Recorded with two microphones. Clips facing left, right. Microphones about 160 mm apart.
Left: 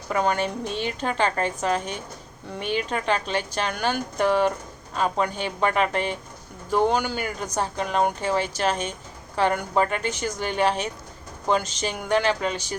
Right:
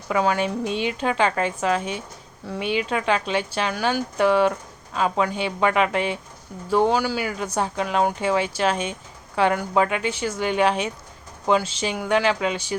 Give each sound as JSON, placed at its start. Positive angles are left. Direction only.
{"t": 0.1, "sound": "speech", "side_deg": -5}
{"t": 0.7, "sound": "a woman's voice", "side_deg": 40}
{"t": 1.0, "sound": "speech", "side_deg": -5}